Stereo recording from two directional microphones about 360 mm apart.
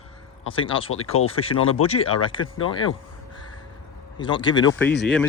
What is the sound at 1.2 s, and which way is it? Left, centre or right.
Speech, centre.